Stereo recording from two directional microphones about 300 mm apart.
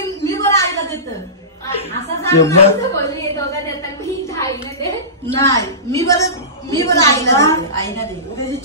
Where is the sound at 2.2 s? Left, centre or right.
Centre.